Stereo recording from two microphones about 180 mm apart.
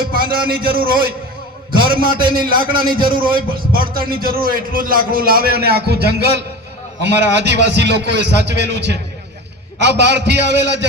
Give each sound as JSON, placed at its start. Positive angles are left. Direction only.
{"t": 0.0, "sound": "a man's voice", "side_deg": -55}